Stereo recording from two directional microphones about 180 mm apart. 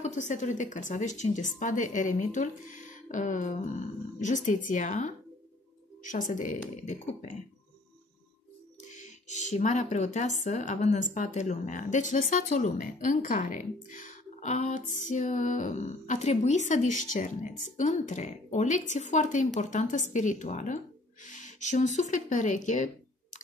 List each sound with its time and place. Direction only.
0.0 s a woman's voice: 40° left (ahead or behind)
6.8 s a sound: 40° left (ahead or behind)
8.8 s a woman's voice: 40° left (ahead or behind)